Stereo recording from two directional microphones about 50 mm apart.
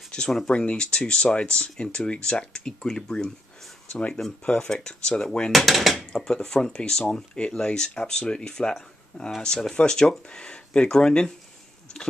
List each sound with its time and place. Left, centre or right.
0.1 s speech: centre
5.5 s dishes: centre
5.9 s speech: centre